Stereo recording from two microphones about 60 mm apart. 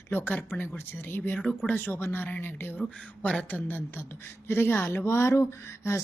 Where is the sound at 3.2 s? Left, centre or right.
Centre.